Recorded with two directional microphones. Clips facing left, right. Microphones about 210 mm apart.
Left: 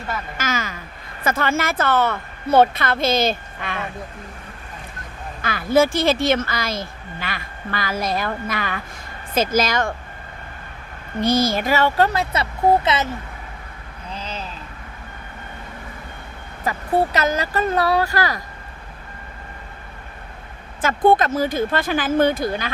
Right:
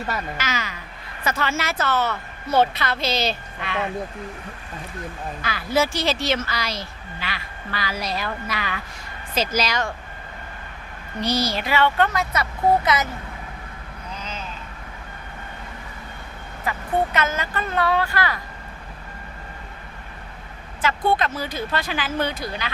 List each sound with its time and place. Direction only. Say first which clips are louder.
0.3 s a woman's voice: left 3 dB; 45° left (ahead or behind)
5.4 s speech: left 6 dB; 50° left (ahead or behind)
11.2 s speech: left 5 dB; 50° left (ahead or behind); by 13.1 s 25° left (ahead or behind)
14.1 s a sound: left 3 dB; 30° left (ahead or behind)
16.6 s speech: left 3 dB; 35° left (ahead or behind)
20.8 s speech: left 5 dB; 50° left (ahead or behind)